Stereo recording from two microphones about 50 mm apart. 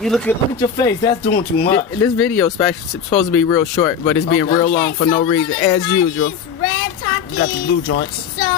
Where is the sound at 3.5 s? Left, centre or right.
Left.